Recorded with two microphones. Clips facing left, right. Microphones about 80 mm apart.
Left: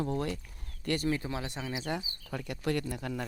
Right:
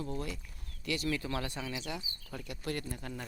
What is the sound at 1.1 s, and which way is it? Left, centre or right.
Speech, left.